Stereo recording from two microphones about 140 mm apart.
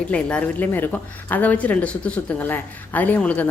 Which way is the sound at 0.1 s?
10° left (ahead or behind).